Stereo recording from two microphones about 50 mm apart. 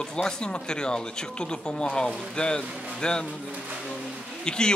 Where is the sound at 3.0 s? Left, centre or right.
Centre.